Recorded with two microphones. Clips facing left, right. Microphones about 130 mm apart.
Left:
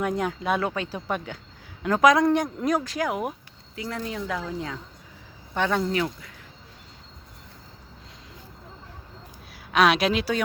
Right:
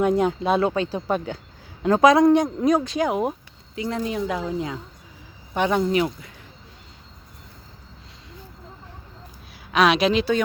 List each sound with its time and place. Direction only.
0.0 s speech: 25° right (ahead or behind)
2.2 s speech: 20° right (ahead or behind)
9.7 s speech: centre (ahead or behind)